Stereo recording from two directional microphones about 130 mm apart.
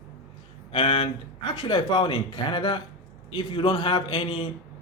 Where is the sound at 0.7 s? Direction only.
45° left (ahead or behind).